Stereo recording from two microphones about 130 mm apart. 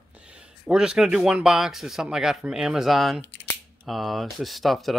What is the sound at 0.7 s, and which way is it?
Speech, 5° right (ahead or behind).